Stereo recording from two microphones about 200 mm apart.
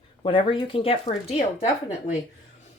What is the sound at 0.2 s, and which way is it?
Speech, 25° left (ahead or behind).